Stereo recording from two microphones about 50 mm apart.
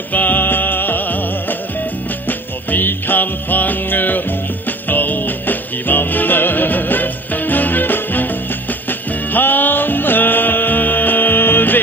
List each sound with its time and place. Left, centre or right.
0.1 s music: left
2.2 s music: left
9.3 s music: left